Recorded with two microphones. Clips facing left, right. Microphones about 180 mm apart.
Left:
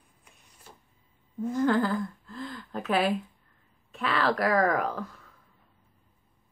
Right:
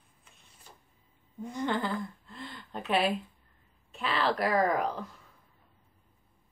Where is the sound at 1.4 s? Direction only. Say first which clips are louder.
Left 7 dB; centre (ahead or behind).